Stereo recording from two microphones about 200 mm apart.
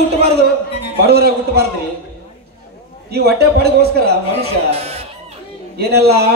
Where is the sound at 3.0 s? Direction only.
50° right (ahead or behind).